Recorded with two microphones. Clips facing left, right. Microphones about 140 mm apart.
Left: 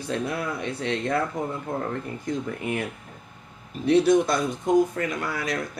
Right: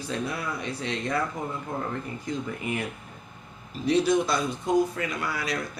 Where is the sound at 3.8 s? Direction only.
55° left (ahead or behind).